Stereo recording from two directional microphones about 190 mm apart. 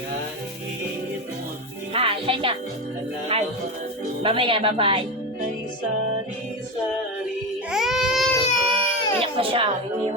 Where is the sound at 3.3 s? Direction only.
30° right (ahead or behind).